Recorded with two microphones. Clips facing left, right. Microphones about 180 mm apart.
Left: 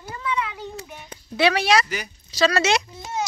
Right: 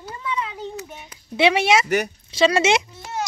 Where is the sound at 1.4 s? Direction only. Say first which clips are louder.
Right 2 dB; 20° right (ahead or behind).